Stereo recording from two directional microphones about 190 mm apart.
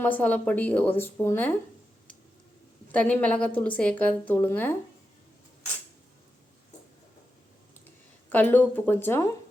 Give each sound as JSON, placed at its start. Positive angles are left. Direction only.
{"t": 0.0, "sound": "a woman's voice", "side_deg": 10}
{"t": 2.9, "sound": "a woman's voice", "side_deg": 5}
{"t": 8.3, "sound": "a woman's voice", "side_deg": 10}